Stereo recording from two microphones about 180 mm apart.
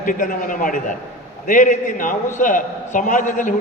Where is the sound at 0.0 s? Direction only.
50° left (ahead or behind).